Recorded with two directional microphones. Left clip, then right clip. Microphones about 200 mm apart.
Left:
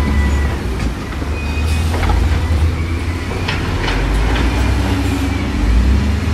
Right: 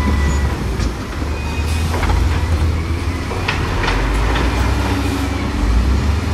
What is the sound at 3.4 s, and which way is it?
Train, 20° right (ahead or behind).